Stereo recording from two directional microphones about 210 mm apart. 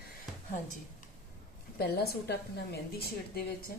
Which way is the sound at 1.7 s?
50° left (ahead or behind).